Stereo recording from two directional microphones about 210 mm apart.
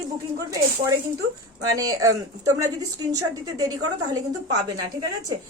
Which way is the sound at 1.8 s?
15° right (ahead or behind).